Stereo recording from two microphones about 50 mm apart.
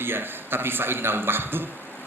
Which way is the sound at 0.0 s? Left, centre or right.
Right.